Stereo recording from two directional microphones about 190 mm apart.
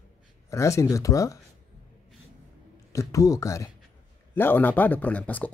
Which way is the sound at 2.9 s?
15° left (ahead or behind).